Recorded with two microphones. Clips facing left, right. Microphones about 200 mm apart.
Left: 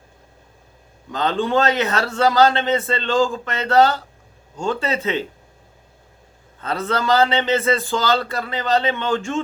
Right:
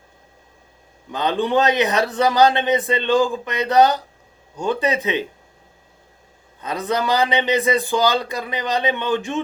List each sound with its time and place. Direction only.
1.1 s a man's voice: 15° right (ahead or behind)
6.6 s a man's voice: 15° right (ahead or behind)